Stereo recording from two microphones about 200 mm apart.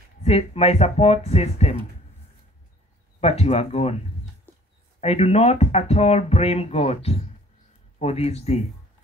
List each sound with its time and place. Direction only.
0.2 s speech: 30° left (ahead or behind)
3.2 s speech: 30° left (ahead or behind)
4.5 s a sound: 10° left (ahead or behind)
5.0 s speech: 30° left (ahead or behind)